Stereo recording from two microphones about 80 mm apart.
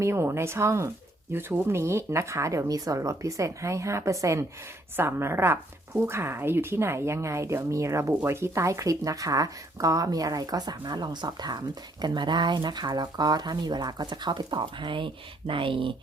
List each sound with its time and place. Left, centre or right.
0.0 s speech: right